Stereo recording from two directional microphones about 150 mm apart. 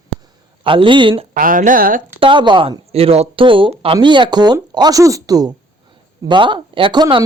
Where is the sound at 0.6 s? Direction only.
35° right (ahead or behind).